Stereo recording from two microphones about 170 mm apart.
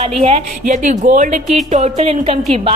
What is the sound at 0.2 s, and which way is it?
Speech, 35° right (ahead or behind).